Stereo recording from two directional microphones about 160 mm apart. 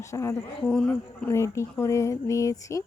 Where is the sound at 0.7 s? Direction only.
5° left (ahead or behind).